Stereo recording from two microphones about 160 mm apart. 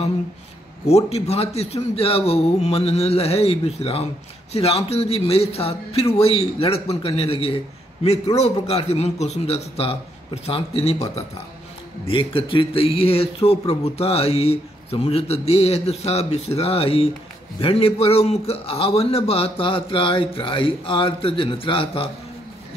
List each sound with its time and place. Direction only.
0.8 s speech: 40° left (ahead or behind)